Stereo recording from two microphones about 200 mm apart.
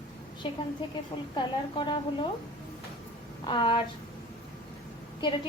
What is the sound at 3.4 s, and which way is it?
Speech, 25° left (ahead or behind).